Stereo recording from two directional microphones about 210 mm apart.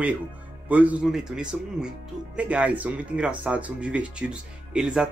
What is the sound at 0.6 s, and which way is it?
Speech, 5° right (ahead or behind).